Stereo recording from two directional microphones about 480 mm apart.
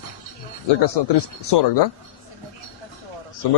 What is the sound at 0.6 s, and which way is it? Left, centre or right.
Speech, left.